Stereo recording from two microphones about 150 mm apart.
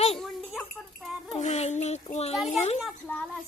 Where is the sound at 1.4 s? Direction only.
50° left (ahead or behind).